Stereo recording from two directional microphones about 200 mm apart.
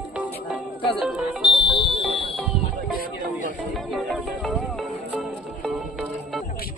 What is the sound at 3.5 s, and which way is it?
Music, centre (ahead or behind).